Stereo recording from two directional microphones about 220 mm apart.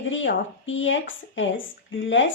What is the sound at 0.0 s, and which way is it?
A woman's voice, 60° left (ahead or behind).